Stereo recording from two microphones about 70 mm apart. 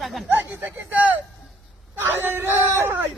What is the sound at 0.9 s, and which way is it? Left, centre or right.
A man's voice, right.